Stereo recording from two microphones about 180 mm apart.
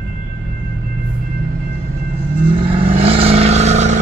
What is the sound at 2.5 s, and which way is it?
Vehicle, 30° right (ahead or behind).